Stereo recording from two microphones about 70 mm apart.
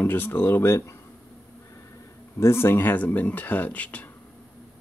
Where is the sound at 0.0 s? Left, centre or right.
Left.